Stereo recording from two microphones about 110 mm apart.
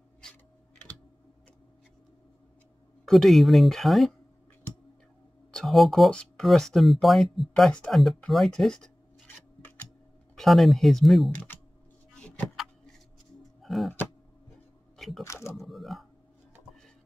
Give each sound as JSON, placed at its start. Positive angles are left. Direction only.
{"t": 0.2, "sound": "computer keyboard", "side_deg": 10}
{"t": 3.1, "sound": "speech", "side_deg": 0}
{"t": 5.5, "sound": "speech", "side_deg": 0}
{"t": 10.3, "sound": "speech", "side_deg": 0}
{"t": 11.3, "sound": "speech", "side_deg": 15}
{"t": 12.2, "sound": "vehicle", "side_deg": 10}
{"t": 13.6, "sound": "speech", "side_deg": 0}
{"t": 15.0, "sound": "a sound", "side_deg": 0}
{"t": 15.5, "sound": "speech", "side_deg": 0}